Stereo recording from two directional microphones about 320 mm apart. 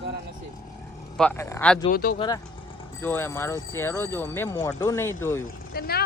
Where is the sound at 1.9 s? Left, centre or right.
Left.